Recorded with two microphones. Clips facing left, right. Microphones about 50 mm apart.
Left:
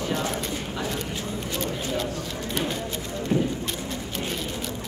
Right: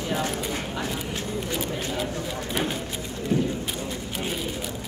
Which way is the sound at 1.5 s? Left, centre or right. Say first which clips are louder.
Left 2 dB; centre.